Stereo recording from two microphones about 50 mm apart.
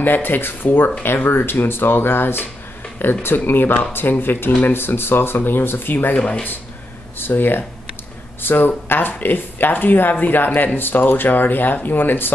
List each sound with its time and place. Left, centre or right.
0.0 s speech: left
6.1 s speech: left
7.2 s speech: left